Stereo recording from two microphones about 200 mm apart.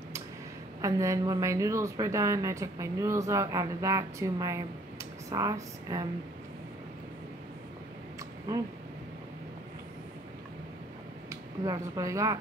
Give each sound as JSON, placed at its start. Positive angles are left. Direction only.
{"t": 0.7, "sound": "a woman's voice", "side_deg": -15}
{"t": 11.2, "sound": "speech", "side_deg": -20}